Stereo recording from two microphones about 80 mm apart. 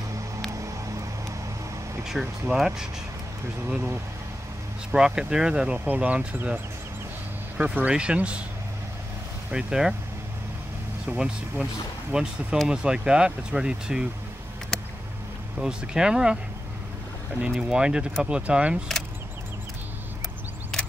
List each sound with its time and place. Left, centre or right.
2.0 s speech: centre
3.6 s speech: centre
4.9 s speech: centre
9.5 s speech: centre
11.1 s speech: centre
15.6 s speech: centre
17.4 s speech: centre
20.7 s a sound: centre